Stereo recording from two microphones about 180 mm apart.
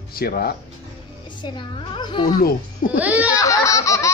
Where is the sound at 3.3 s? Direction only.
15° left (ahead or behind).